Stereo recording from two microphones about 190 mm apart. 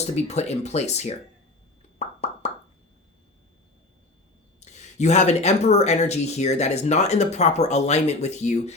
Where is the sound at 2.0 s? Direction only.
35° left (ahead or behind).